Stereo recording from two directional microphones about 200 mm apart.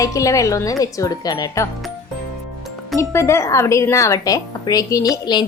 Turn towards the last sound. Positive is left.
turn(degrees=20)  # may be behind; listen again after turning